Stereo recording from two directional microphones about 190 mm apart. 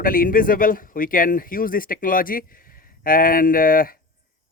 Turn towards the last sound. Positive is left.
turn(degrees=50)  # may be behind; listen again after turning